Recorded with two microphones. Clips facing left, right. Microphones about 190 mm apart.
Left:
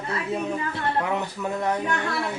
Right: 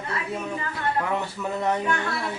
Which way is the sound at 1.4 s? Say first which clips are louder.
Even; centre (ahead or behind).